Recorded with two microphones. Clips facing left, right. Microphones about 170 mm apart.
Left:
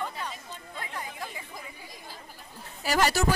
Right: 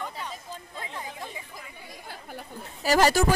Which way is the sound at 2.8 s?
40° right (ahead or behind).